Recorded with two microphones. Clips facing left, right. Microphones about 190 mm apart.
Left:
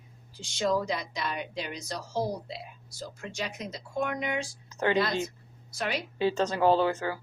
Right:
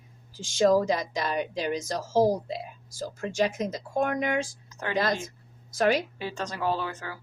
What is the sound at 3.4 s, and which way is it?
A woman's voice, 45° right (ahead or behind).